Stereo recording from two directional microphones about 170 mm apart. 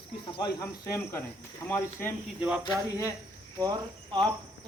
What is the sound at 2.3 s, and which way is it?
Speech, 5° right (ahead or behind).